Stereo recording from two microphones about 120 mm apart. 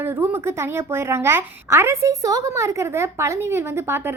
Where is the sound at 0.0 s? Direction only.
20° right (ahead or behind).